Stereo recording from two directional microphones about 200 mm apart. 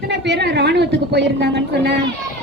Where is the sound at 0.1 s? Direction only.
60° right (ahead or behind).